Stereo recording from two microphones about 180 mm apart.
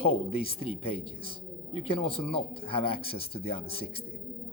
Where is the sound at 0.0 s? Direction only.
30° left (ahead or behind).